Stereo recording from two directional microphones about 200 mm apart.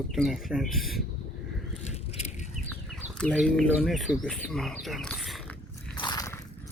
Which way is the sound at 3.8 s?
Centre (ahead or behind).